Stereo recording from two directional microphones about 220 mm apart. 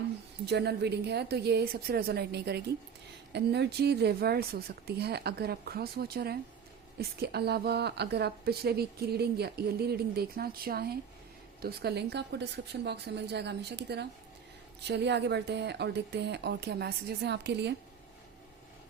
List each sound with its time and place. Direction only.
0.4 s a woman's voice: 50° right (ahead or behind)